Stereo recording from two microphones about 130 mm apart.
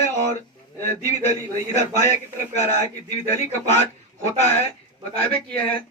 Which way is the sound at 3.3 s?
60° left (ahead or behind).